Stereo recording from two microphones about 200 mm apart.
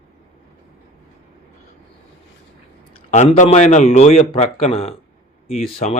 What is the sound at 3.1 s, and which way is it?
A man's voice, 35° left (ahead or behind).